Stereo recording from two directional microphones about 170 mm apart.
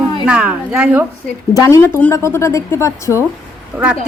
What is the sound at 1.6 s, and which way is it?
Speech, 15° left (ahead or behind).